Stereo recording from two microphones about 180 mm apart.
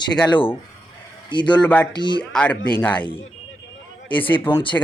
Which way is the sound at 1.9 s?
25° left (ahead or behind).